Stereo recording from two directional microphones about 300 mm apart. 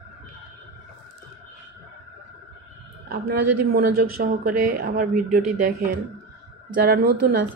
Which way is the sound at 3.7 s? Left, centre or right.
Right.